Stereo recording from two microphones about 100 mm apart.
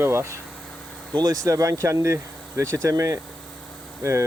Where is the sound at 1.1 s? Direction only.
40° right (ahead or behind).